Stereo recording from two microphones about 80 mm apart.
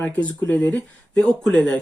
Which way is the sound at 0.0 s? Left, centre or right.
Centre.